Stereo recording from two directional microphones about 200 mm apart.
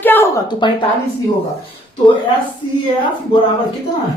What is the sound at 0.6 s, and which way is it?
Speech, 25° left (ahead or behind).